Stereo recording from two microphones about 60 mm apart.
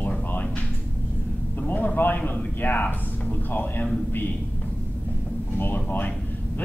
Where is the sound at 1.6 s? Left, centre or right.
Left.